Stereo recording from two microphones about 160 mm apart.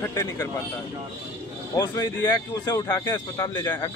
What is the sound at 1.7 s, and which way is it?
A man's voice, 25° left (ahead or behind).